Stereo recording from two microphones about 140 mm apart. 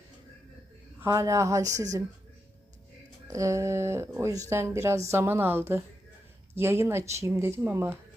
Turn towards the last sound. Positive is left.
turn(degrees=-15)  # may be behind; listen again after turning